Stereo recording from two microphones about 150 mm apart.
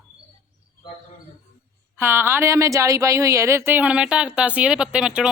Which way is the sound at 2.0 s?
15° right (ahead or behind).